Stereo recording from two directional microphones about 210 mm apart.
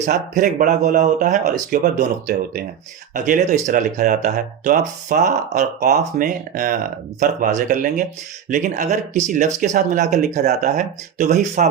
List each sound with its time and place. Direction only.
0.0 s speech: 40° right (ahead or behind)